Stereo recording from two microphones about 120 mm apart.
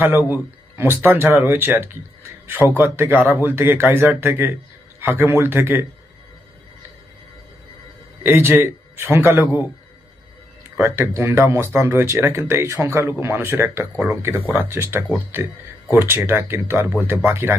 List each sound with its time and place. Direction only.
0.0 s speech: 15° right (ahead or behind)
8.3 s speech: 20° right (ahead or behind)
10.8 s speech: 25° right (ahead or behind)